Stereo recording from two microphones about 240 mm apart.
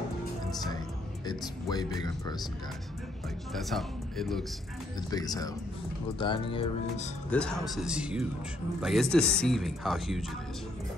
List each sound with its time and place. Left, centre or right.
1.2 s speech: centre
3.5 s speech: centre
5.1 s speech: centre
7.2 s speech: centre